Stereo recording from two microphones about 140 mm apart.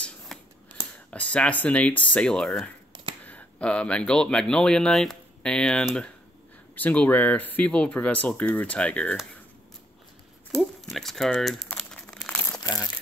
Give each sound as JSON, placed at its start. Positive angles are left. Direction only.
{"t": 0.3, "sound": "scissors", "side_deg": 5}
{"t": 1.1, "sound": "speech", "side_deg": 10}
{"t": 10.5, "sound": "crumpling", "side_deg": 0}
{"t": 12.4, "sound": "crumpling", "side_deg": 25}